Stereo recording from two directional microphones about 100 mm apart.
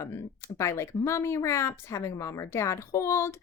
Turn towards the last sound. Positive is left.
turn(degrees=25)  # may be behind; listen again after turning